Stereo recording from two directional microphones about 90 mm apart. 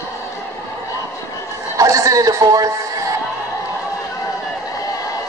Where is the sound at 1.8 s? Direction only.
35° right (ahead or behind).